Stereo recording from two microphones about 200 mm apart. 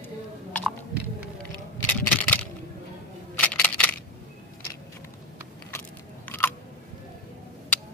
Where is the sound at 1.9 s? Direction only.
10° left (ahead or behind).